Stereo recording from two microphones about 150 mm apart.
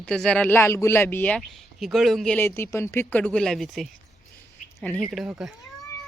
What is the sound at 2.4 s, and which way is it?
Speech, 15° left (ahead or behind).